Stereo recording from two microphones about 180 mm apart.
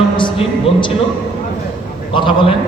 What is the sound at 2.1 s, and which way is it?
Speech, 25° left (ahead or behind).